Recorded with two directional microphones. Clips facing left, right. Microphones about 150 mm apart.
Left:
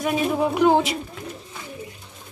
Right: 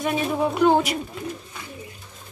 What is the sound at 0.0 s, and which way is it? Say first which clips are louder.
Speech: left 1 dB; 5° left (ahead or behind).